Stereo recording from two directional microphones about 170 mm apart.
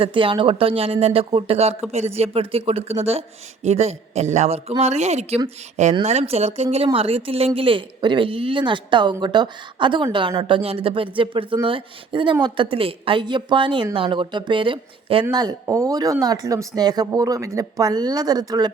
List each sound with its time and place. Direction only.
0.0 s speech: 30° right (ahead or behind)